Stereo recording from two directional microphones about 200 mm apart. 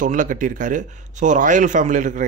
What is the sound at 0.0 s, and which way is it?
Speech, 40° right (ahead or behind).